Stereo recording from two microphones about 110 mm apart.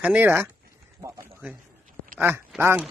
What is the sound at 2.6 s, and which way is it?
Speech, 20° right (ahead or behind).